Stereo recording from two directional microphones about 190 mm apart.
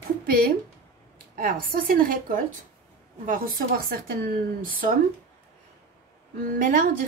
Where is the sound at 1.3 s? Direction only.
45° right (ahead or behind).